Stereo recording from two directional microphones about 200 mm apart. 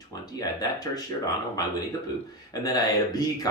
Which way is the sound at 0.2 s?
20° left (ahead or behind).